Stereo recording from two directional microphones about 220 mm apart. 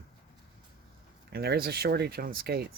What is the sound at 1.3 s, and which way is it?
Speech, 45° right (ahead or behind).